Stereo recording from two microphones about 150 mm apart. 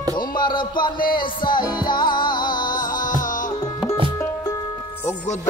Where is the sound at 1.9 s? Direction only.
30° left (ahead or behind).